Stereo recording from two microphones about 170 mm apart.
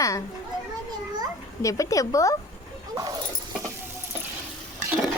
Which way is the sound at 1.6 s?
20° left (ahead or behind).